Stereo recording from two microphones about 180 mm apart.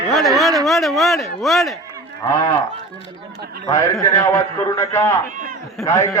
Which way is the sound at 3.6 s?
20° left (ahead or behind).